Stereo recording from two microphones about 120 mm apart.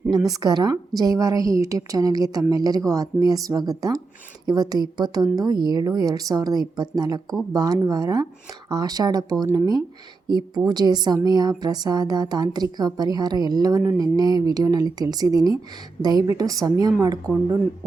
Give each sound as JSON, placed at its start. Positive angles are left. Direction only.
{"t": 0.1, "sound": "a woman's voice", "side_deg": -30}
{"t": 10.2, "sound": "a woman's voice", "side_deg": -35}